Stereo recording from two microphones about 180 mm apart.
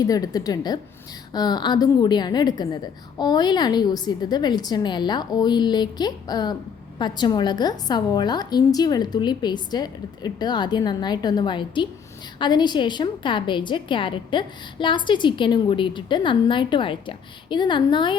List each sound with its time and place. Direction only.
0.0 s a woman's voice: 20° left (ahead or behind)